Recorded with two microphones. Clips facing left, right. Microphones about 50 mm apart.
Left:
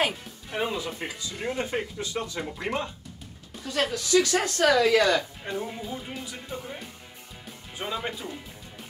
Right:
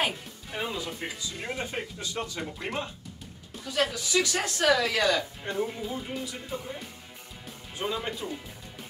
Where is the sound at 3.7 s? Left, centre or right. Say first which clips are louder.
Left 3 dB; left.